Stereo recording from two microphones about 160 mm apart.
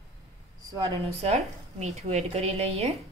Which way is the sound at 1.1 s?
40° right (ahead or behind).